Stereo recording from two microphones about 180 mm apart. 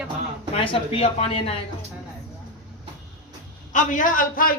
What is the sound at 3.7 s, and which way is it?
Speech, 45° left (ahead or behind).